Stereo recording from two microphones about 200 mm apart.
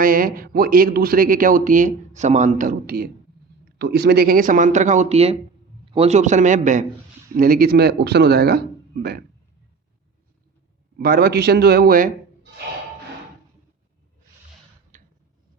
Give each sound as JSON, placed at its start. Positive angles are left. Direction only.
{"t": 0.0, "sound": "a man's voice", "side_deg": -45}
{"t": 10.9, "sound": "a man's voice", "side_deg": -50}
{"t": 14.9, "sound": "a sound", "side_deg": -40}